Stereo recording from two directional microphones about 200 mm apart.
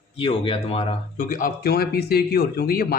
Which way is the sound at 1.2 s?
45° left (ahead or behind).